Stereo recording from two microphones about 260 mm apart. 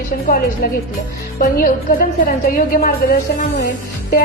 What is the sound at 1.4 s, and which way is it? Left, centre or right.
A woman's voice, left.